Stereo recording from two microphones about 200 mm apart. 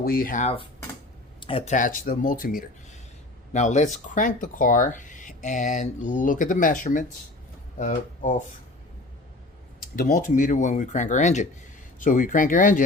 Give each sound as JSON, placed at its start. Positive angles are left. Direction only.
{"t": 0.0, "sound": "cutlery", "side_deg": 45}
{"t": 1.4, "sound": "speech", "side_deg": 30}
{"t": 9.9, "sound": "speech", "side_deg": 40}